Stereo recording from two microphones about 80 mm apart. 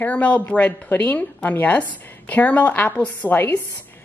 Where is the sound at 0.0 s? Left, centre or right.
Centre.